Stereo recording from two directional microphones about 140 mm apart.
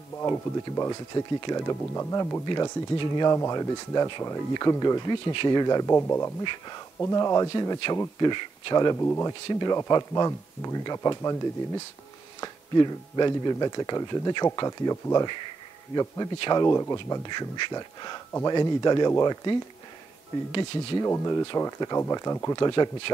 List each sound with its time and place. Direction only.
0.2 s speech: 20° left (ahead or behind)
6.4 s speech: 35° left (ahead or behind)
7.0 s speech: 20° left (ahead or behind)
8.9 s speech: 15° left (ahead or behind)
9.5 s speech: 30° left (ahead or behind)